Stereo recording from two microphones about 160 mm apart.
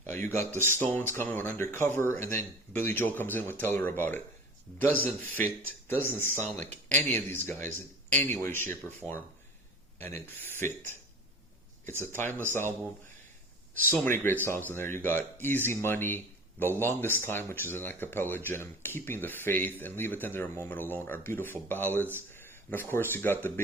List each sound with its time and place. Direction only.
0.0 s speech: 15° left (ahead or behind)
10.2 s speech: 15° left (ahead or behind)
13.7 s speech: 10° left (ahead or behind)